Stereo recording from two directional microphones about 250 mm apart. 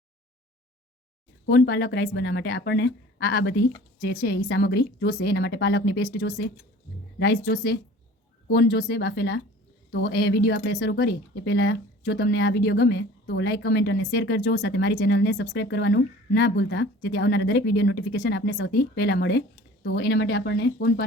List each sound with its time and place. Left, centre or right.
1.5 s speech: left